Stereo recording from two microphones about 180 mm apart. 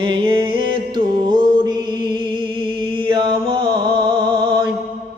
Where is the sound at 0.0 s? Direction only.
30° right (ahead or behind).